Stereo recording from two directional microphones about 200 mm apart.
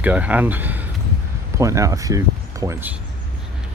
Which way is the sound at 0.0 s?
5° right (ahead or behind).